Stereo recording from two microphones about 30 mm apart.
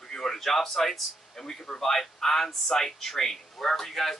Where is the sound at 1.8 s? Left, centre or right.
Centre.